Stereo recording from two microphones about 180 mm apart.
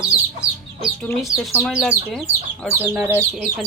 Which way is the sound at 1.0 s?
5° left (ahead or behind).